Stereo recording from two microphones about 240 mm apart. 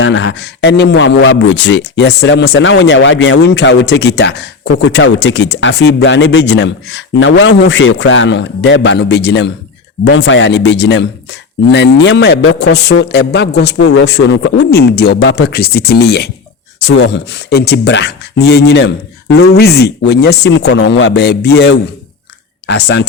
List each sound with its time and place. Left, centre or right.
0.0 s speech: left